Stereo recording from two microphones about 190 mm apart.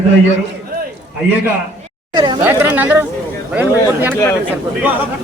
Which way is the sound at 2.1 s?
20° right (ahead or behind).